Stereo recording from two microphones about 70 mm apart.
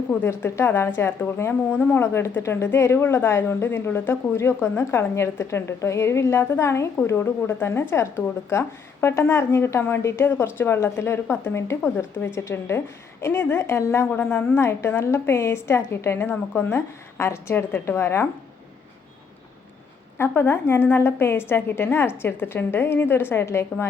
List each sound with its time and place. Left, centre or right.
0.1 s a woman's voice: left
2.1 s a woman's voice: left
20.1 s a woman's voice: left